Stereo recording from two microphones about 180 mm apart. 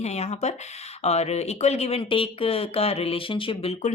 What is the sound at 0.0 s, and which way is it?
Speech, 35° left (ahead or behind).